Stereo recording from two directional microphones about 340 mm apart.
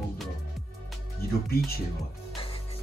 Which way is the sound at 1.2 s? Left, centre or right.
Left.